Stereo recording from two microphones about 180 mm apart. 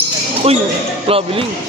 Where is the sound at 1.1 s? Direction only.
30° right (ahead or behind).